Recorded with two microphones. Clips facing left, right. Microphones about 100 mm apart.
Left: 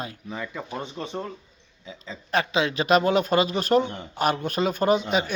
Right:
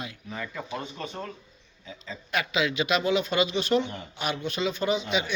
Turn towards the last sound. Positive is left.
turn(degrees=45)  # may be behind; listen again after turning